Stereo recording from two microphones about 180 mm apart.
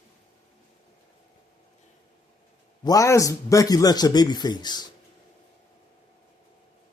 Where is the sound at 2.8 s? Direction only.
20° left (ahead or behind).